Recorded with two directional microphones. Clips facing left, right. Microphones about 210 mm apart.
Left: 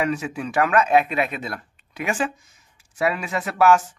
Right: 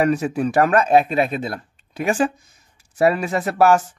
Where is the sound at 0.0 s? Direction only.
40° right (ahead or behind).